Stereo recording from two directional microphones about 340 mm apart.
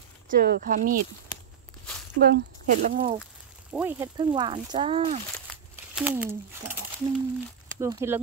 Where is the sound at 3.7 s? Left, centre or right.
Centre.